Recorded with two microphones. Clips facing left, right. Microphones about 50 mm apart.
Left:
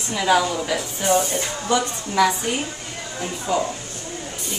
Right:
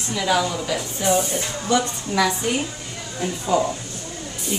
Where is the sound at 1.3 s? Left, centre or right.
Centre.